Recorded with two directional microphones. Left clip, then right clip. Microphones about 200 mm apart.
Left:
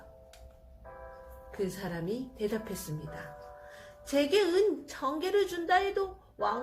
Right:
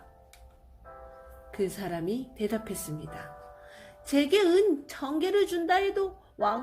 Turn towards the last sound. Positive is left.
turn(degrees=-55)  # may be behind; listen again after turning